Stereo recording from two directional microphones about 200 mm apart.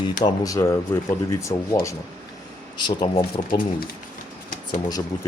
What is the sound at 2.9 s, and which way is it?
Speech, 25° left (ahead or behind).